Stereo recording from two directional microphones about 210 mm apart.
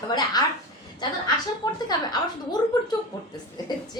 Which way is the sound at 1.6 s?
20° left (ahead or behind).